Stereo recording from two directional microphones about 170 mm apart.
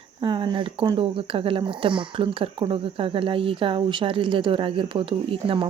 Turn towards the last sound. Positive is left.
turn(degrees=-30)  # may be behind; listen again after turning